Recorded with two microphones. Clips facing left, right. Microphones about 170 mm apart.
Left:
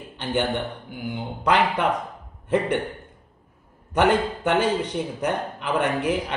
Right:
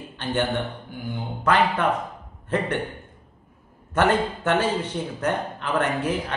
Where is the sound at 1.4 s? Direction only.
15° left (ahead or behind).